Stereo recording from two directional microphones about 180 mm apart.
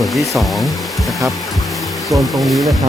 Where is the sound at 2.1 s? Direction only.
Centre (ahead or behind).